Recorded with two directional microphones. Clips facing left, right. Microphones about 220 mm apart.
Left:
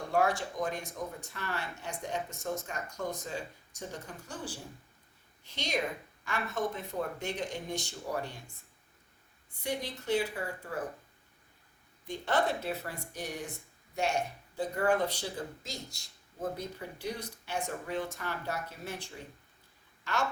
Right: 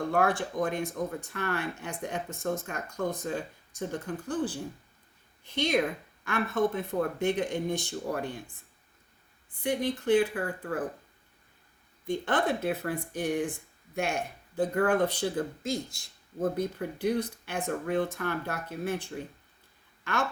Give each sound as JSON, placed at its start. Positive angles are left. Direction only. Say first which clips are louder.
{"t": 0.1, "sound": "speech", "louder": "left 1 dB", "side_deg": -55}
{"t": 9.6, "sound": "a woman's voice", "louder": "right 7 dB", "side_deg": -55}
{"t": 12.0, "sound": "speech", "louder": "right 3 dB", "side_deg": -55}